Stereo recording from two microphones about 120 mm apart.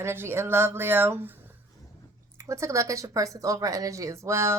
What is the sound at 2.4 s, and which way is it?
A woman's voice, 25° right (ahead or behind).